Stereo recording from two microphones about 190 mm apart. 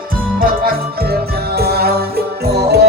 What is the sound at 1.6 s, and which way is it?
Music, 55° right (ahead or behind).